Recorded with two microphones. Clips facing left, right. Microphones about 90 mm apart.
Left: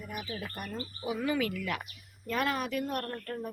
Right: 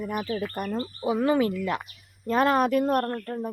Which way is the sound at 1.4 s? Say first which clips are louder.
Right 7 dB; 30° right (ahead or behind).